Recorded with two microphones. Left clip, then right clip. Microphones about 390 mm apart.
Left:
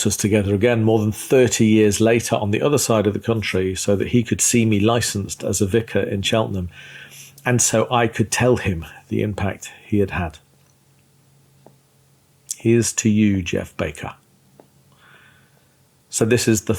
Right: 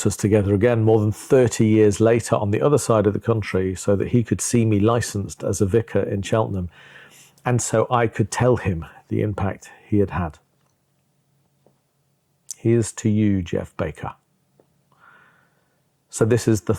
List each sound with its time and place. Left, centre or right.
0.0 s speech: right
12.5 s speech: right
16.0 s speech: right